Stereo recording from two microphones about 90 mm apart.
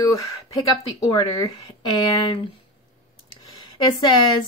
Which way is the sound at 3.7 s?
65° left (ahead or behind).